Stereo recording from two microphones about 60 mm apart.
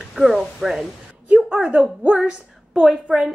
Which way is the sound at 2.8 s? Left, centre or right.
Centre.